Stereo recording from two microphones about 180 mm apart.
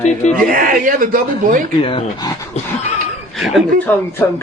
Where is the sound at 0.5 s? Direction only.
50° right (ahead or behind).